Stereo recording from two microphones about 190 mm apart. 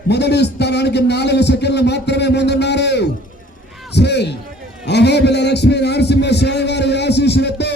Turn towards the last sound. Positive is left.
turn(degrees=65)  # may be behind; listen again after turning